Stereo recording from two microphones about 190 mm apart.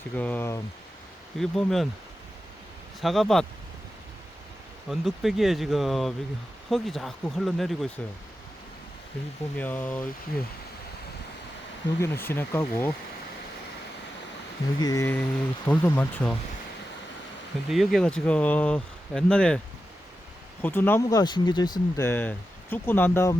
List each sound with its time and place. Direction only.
0.2 s speech: 10° left (ahead or behind)
1.4 s speech: centre (ahead or behind)
3.0 s speech: centre (ahead or behind)
4.9 s speech: centre (ahead or behind)
9.6 s speech: 10° left (ahead or behind)
11.9 s speech: 15° left (ahead or behind)
14.8 s speech: 20° left (ahead or behind)
17.7 s speech: centre (ahead or behind)
20.6 s speech: 10° left (ahead or behind)